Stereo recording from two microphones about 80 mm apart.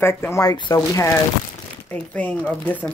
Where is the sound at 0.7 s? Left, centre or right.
Left.